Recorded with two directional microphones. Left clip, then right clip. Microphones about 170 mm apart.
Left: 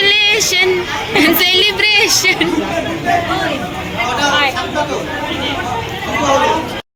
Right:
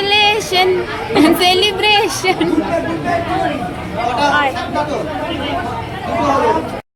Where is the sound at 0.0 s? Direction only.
25° right (ahead or behind).